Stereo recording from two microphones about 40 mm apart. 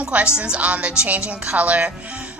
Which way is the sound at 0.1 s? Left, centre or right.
Right.